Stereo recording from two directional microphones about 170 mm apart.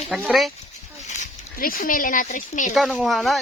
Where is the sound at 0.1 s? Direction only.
5° right (ahead or behind).